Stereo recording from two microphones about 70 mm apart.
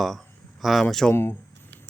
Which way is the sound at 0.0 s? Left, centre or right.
Centre.